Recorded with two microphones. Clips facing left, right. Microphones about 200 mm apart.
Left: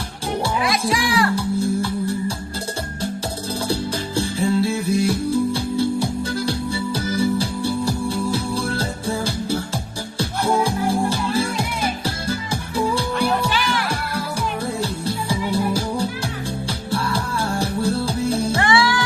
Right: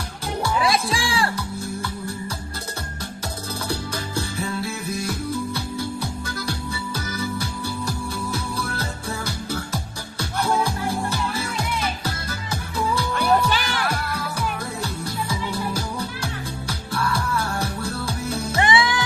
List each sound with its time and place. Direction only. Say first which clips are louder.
0.6 s music: left 2 dB; 30° right (ahead or behind)
1.4 s music: left 9 dB; 30° left (ahead or behind)
3.7 s music: left 4 dB; 30° left (ahead or behind)
18.6 s music: right 1 dB; 20° right (ahead or behind)